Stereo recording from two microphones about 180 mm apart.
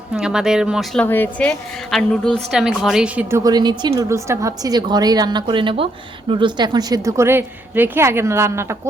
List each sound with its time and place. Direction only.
0.1 s speech: 5° right (ahead or behind)
1.0 s a woman's voice: 10° left (ahead or behind); by 8.6 s 15° right (ahead or behind)